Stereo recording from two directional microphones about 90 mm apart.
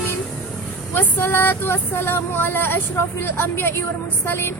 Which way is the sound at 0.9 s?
25° left (ahead or behind).